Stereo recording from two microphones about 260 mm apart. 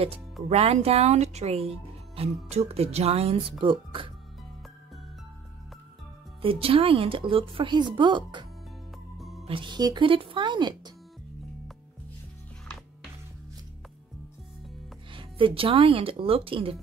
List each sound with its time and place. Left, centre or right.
0.0 s a woman's voice: right
6.4 s a woman's voice: right
9.2 s music: centre
9.5 s speech: centre
15.1 s a woman's voice: centre